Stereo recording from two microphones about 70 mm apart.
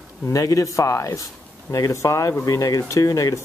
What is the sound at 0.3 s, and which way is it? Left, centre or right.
Speech, left.